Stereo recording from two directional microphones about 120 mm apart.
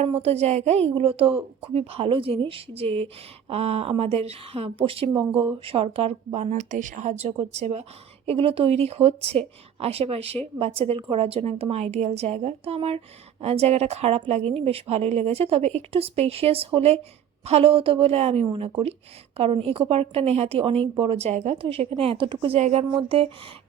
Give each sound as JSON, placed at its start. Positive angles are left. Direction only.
{"t": 0.0, "sound": "a woman's voice", "side_deg": -60}
{"t": 8.3, "sound": "a woman's voice", "side_deg": -50}
{"t": 18.4, "sound": "a woman's voice", "side_deg": -50}
{"t": 22.5, "sound": "a woman's voice", "side_deg": -65}
{"t": 23.0, "sound": "a woman's voice", "side_deg": -55}